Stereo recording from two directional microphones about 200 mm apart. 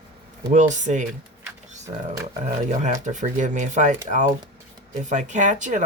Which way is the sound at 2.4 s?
35° right (ahead or behind).